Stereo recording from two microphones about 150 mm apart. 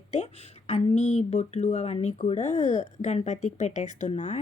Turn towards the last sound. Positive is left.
turn(degrees=50)  # may be behind; listen again after turning